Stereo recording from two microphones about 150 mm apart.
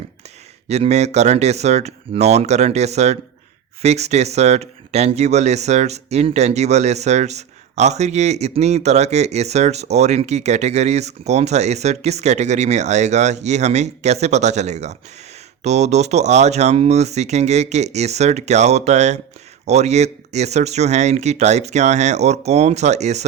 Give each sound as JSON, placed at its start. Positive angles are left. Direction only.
{"t": 0.7, "sound": "speech", "side_deg": -45}